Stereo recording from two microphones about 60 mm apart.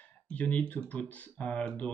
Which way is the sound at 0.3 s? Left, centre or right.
Left.